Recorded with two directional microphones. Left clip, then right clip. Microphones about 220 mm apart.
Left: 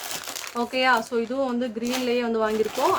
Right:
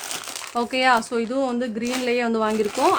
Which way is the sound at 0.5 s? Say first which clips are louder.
Right 3 dB; 50° right (ahead or behind).